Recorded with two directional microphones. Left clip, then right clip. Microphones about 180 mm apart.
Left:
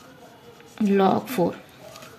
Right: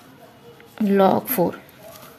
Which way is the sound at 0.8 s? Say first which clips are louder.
Right 3 dB; 20° right (ahead or behind).